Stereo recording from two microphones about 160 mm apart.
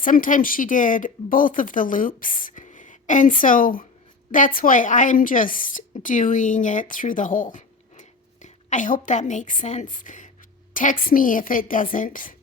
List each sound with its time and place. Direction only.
0.0 s a woman's voice: 55° left (ahead or behind)